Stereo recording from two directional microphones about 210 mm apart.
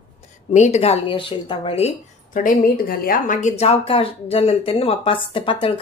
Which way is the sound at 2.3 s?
40° left (ahead or behind).